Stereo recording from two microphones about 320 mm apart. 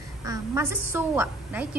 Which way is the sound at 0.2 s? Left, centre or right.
Centre.